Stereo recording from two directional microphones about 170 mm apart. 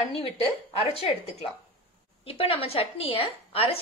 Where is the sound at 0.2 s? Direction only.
35° left (ahead or behind).